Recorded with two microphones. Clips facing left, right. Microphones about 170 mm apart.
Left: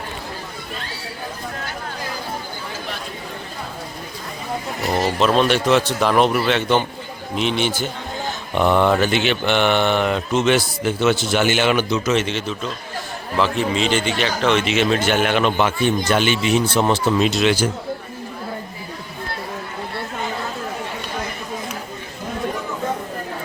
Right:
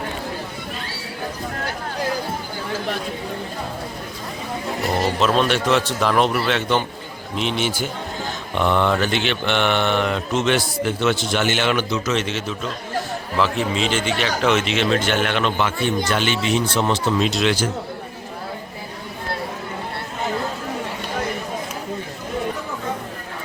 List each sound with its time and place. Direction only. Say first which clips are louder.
5.2 s mantra: left 3 dB; centre (ahead or behind)
8.5 s mantra: left 3 dB; 5° left (ahead or behind)
12.1 s mantra: left 2 dB; centre (ahead or behind)
14.7 s speech: left 2 dB; 5° left (ahead or behind)